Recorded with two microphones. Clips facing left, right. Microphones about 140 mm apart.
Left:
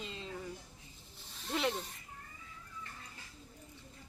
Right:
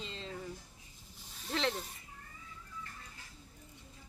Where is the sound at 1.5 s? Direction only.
5° left (ahead or behind).